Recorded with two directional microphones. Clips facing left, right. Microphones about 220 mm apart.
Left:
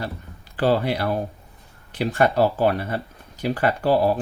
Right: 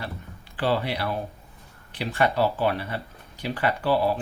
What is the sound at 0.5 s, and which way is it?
Speech, 45° left (ahead or behind).